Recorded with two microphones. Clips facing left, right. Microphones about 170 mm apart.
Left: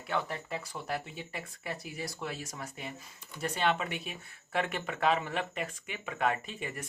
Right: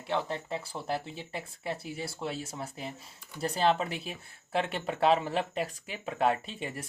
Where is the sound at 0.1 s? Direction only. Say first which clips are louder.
Right 2 dB; 25° right (ahead or behind).